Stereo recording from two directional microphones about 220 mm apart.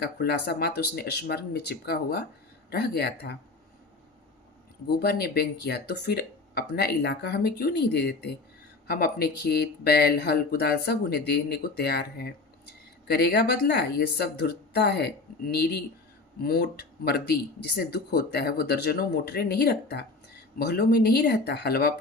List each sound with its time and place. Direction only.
0.0 s speech: 45° left (ahead or behind)
4.9 s speech: 45° left (ahead or behind)